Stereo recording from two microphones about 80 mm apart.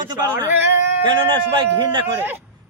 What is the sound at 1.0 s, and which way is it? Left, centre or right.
Speech, right.